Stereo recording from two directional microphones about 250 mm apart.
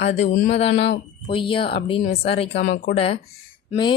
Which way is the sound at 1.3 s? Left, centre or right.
Left.